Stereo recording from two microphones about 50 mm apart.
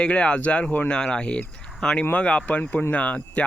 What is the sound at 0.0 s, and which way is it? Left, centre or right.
Speech, left.